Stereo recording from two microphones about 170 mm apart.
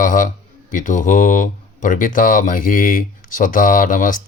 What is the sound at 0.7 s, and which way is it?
Speech, 50° left (ahead or behind).